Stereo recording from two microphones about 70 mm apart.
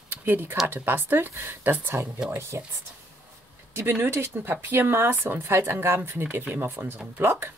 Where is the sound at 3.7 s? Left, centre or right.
Right.